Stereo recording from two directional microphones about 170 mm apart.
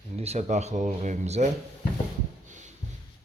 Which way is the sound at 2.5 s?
45° right (ahead or behind).